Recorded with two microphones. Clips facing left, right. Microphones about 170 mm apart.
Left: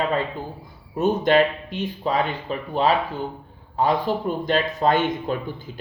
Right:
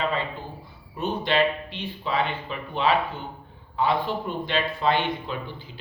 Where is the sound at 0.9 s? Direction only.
45° left (ahead or behind).